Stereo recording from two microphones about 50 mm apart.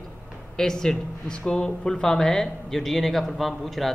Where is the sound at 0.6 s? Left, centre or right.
Centre.